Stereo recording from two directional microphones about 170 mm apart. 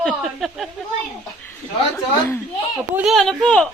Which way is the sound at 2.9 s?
Centre (ahead or behind).